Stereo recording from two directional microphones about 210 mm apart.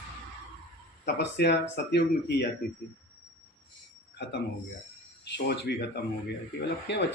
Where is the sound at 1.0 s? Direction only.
55° left (ahead or behind).